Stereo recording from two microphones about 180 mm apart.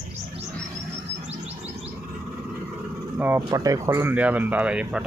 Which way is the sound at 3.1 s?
10° right (ahead or behind).